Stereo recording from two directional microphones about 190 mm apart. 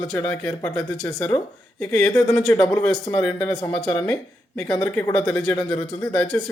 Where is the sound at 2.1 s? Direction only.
20° left (ahead or behind).